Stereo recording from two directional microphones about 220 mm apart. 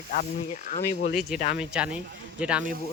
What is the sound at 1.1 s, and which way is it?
Speech, centre (ahead or behind).